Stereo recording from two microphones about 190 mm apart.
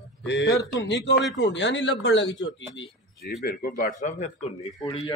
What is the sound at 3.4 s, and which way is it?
Speech, 50° left (ahead or behind).